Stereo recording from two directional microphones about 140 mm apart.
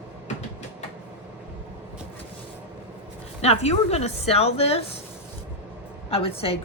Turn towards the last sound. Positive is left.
turn(degrees=45)  # may be behind; listen again after turning